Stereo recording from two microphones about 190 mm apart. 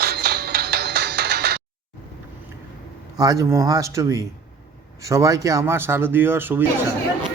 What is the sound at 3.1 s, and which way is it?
Speech, 20° right (ahead or behind).